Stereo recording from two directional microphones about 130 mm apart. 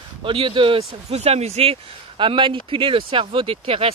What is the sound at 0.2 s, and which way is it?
Speech, 40° right (ahead or behind).